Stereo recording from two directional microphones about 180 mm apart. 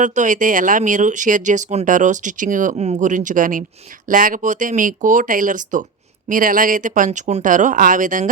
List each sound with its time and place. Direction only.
0.0 s speech: 45° right (ahead or behind)